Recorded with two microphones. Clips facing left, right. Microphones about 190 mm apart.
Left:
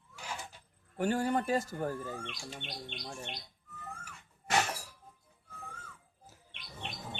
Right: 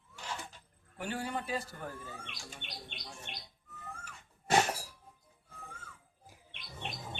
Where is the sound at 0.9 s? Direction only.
45° left (ahead or behind).